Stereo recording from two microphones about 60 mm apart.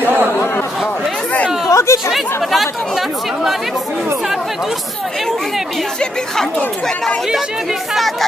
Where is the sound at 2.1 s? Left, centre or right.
Centre.